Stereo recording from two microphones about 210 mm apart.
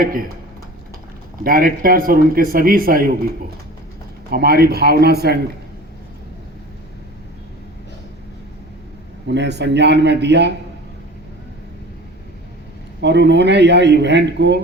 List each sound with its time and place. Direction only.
0.0 s speech: 40° right (ahead or behind)
1.5 s speech: 45° right (ahead or behind)
4.3 s speech: 45° right (ahead or behind)
9.2 s speech: 55° right (ahead or behind)
13.0 s speech: 55° right (ahead or behind)